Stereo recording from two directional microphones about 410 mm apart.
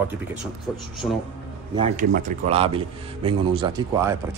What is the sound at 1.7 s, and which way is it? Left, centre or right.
Speech, centre.